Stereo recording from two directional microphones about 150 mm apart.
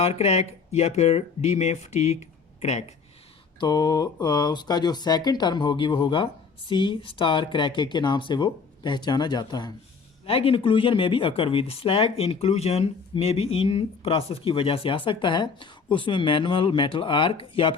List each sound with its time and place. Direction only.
0.0 s speech: 40° left (ahead or behind)
3.6 s speech: 30° left (ahead or behind)
10.2 s speech: 40° left (ahead or behind)